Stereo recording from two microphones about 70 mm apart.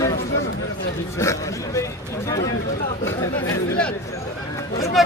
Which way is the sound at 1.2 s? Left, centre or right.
Left.